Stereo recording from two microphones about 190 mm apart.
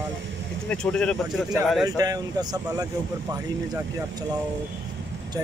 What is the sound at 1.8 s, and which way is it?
Speech, 20° right (ahead or behind).